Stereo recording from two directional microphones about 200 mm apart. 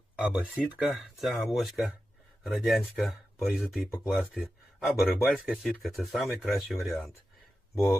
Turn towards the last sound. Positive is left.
turn(degrees=15)  # may be behind; listen again after turning